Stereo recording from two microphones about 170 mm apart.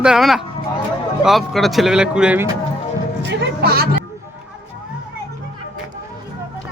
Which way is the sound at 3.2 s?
80° right.